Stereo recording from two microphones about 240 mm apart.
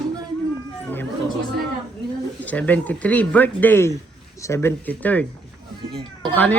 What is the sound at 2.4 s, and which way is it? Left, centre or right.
Speech, centre.